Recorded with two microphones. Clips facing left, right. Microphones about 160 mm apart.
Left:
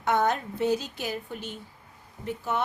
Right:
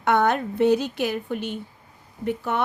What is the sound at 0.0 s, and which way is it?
A woman's voice, 65° right (ahead or behind).